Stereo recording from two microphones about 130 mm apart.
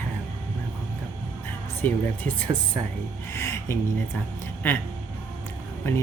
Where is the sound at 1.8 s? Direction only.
15° left (ahead or behind).